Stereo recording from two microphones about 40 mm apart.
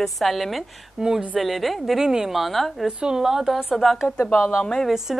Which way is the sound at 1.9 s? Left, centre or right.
Centre.